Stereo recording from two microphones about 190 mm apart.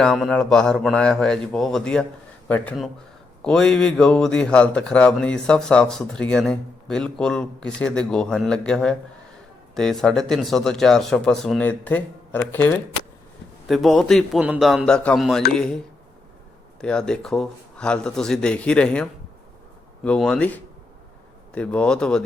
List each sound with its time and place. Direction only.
0.0 s speech: centre (ahead or behind)
16.8 s speech: 5° left (ahead or behind)
20.1 s speech: 5° left (ahead or behind)